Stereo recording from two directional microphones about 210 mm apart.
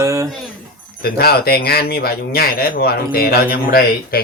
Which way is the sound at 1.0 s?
50° left (ahead or behind).